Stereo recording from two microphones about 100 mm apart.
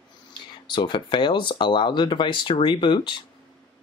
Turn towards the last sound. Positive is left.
turn(degrees=50)  # may be behind; listen again after turning